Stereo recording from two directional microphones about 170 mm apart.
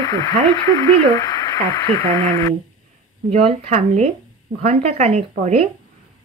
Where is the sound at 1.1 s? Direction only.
25° left (ahead or behind).